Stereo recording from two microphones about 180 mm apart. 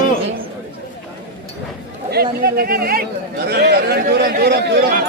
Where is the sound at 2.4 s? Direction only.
55° right (ahead or behind); by 4.8 s 70° right (ahead or behind).